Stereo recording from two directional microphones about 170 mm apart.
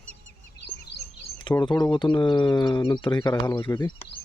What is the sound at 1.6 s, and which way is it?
Speech, 25° left (ahead or behind).